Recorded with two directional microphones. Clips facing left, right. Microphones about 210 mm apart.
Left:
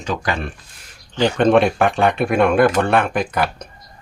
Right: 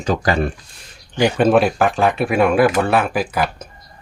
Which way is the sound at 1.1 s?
10° right (ahead or behind).